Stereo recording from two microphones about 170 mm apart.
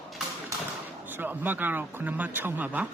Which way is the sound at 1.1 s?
10° right (ahead or behind).